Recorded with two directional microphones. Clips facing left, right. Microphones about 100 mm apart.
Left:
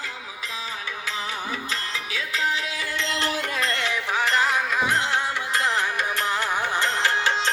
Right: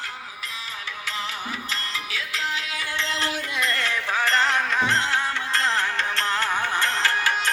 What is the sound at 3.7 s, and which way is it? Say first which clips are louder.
Music: even; 15° left (ahead or behind).